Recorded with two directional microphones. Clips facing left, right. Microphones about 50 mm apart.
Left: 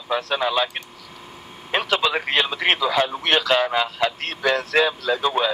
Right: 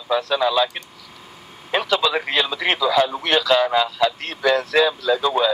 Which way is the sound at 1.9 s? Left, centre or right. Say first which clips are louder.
Right 1 dB; left.